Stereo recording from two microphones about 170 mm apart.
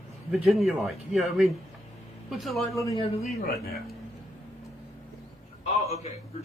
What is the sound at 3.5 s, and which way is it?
Speech, 65° left (ahead or behind).